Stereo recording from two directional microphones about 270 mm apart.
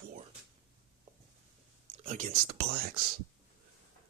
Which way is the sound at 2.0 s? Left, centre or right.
Right.